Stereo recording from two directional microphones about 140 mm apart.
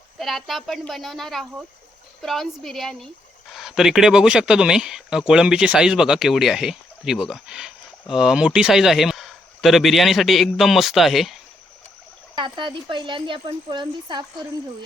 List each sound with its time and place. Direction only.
0.2 s speech: centre (ahead or behind)
12.3 s speech: 35° right (ahead or behind)